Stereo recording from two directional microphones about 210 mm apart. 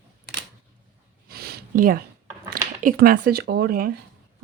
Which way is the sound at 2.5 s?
45° right (ahead or behind).